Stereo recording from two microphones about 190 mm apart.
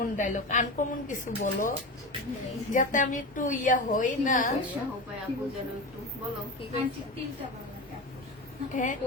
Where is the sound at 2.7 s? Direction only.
40° left (ahead or behind).